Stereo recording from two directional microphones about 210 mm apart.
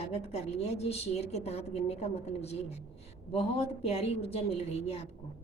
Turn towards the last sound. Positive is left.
turn(degrees=30)  # may be behind; listen again after turning